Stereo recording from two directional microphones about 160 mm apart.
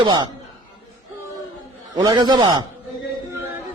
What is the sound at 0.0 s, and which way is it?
Speech, 30° right (ahead or behind).